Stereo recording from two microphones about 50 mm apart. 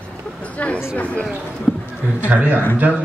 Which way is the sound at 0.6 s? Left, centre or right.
Left.